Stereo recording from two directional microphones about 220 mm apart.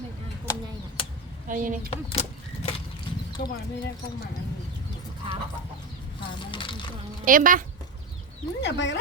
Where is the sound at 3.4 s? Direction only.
50° left (ahead or behind).